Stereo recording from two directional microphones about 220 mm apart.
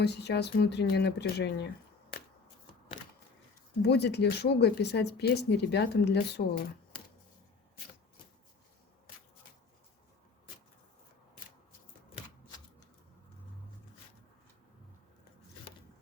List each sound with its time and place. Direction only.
0.0 s speech: 50° left (ahead or behind)
3.8 s speech: 50° left (ahead or behind)